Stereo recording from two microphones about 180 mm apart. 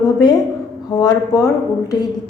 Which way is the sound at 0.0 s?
20° left (ahead or behind).